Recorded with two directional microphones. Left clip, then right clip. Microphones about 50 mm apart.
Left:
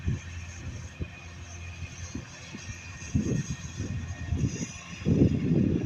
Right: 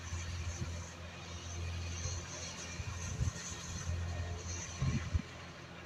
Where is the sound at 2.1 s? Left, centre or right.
Right.